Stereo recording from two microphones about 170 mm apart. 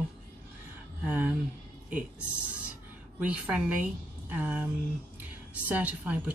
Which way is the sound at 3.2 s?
10° right (ahead or behind).